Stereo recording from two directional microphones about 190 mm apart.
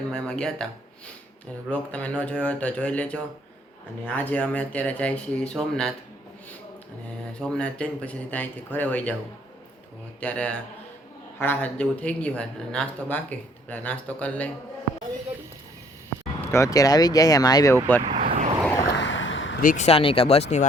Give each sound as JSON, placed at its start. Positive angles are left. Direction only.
{"t": 0.1, "sound": "speech", "side_deg": 5}
{"t": 1.7, "sound": "speech", "side_deg": 5}
{"t": 7.3, "sound": "speech", "side_deg": 5}
{"t": 10.2, "sound": "speech", "side_deg": 5}
{"t": 16.5, "sound": "speech", "side_deg": 15}
{"t": 18.2, "sound": "vehicle", "side_deg": -45}
{"t": 18.9, "sound": "a sound", "side_deg": 75}
{"t": 19.6, "sound": "speech", "side_deg": 40}